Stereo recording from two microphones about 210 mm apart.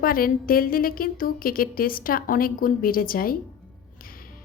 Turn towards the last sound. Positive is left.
turn(degrees=45)  # may be behind; listen again after turning